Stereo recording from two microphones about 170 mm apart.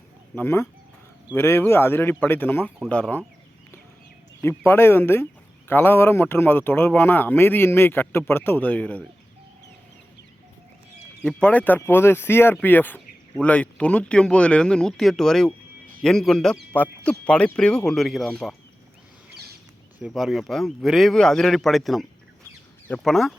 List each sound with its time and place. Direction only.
0.3 s speech: 15° left (ahead or behind)
2.6 s speech: 5° right (ahead or behind)
2.9 s speech: 10° left (ahead or behind)
4.4 s speech: 10° left (ahead or behind)
11.2 s speech: 5° left (ahead or behind)
19.3 s a sound: 70° right (ahead or behind)
20.0 s speech: 5° right (ahead or behind)